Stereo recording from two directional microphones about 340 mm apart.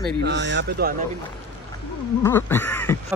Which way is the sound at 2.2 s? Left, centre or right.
Centre.